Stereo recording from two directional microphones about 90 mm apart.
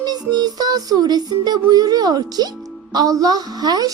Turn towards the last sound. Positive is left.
turn(degrees=-45)  # may be behind; listen again after turning